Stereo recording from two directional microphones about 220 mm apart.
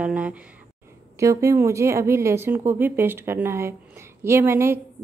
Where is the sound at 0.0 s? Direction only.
5° right (ahead or behind).